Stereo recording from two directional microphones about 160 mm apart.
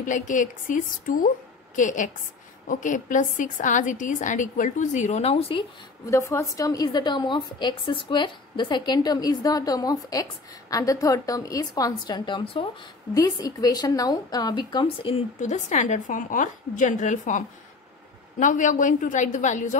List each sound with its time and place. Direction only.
0.0 s a woman's voice: 55° left (ahead or behind); by 5.6 s 40° left (ahead or behind)
6.0 s a woman's voice: 20° left (ahead or behind); by 15.2 s 35° left (ahead or behind)
15.4 s a woman's voice: 50° left (ahead or behind)